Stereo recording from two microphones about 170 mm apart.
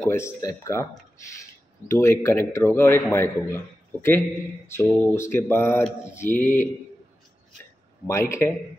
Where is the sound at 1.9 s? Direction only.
15° left (ahead or behind).